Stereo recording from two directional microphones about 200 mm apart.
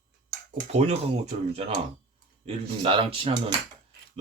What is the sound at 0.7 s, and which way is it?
Speech, 35° right (ahead or behind).